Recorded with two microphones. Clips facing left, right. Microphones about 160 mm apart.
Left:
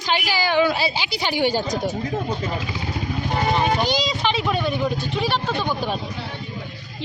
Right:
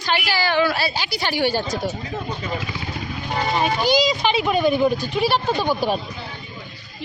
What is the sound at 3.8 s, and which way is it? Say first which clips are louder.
Speech: right 3 dB; 10° right (ahead or behind).